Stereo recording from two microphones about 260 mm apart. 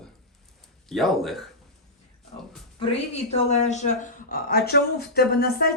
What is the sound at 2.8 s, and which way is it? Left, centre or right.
Speech, left.